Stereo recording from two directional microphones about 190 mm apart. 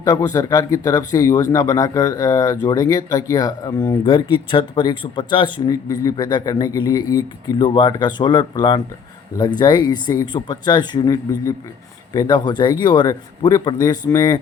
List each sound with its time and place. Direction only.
0.0 s speech: 15° left (ahead or behind)